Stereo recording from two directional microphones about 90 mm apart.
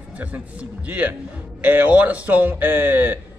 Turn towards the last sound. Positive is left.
turn(degrees=-25)  # may be behind; listen again after turning